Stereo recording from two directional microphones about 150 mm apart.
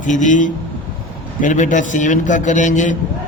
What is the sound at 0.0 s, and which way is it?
Mantra, 55° left (ahead or behind).